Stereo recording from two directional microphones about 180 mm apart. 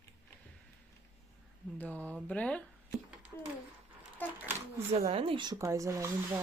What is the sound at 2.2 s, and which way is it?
Speech, 5° left (ahead or behind).